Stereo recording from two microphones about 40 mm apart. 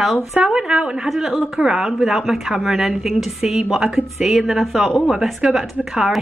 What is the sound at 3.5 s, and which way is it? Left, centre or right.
A woman's voice, centre.